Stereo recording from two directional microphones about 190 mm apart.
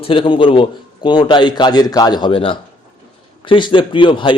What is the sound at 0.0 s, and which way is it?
A man's voice, 25° left (ahead or behind).